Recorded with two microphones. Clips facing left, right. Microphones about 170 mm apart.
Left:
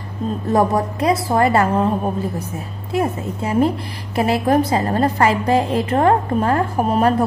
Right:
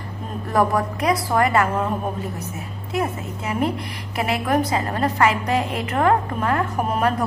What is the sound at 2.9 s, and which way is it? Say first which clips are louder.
A woman's voice: left 4 dB; 30° left (ahead or behind).